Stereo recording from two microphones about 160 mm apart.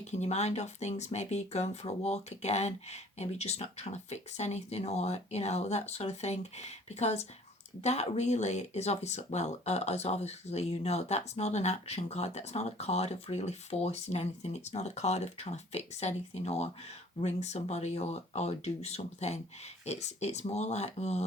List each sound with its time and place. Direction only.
0.0 s speech: 45° left (ahead or behind)